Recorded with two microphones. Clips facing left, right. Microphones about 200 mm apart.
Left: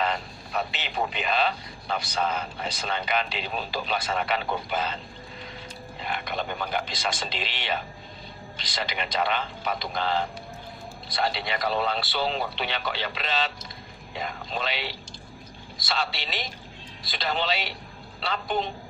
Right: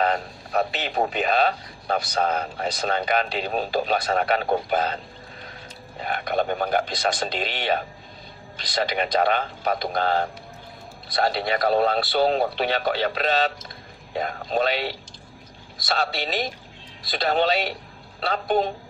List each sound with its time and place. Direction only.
0.0 s a man's voice: 45° right (ahead or behind)
6.0 s a man's voice: 50° right (ahead or behind)